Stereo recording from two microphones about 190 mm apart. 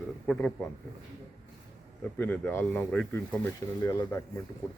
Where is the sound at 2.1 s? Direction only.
10° left (ahead or behind).